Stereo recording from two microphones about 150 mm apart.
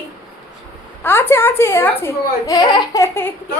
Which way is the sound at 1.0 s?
15° left (ahead or behind).